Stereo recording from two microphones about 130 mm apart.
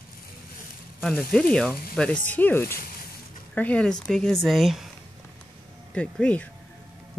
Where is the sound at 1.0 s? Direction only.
5° left (ahead or behind).